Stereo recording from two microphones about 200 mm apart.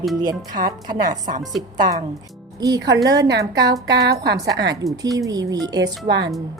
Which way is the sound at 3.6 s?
55° right (ahead or behind).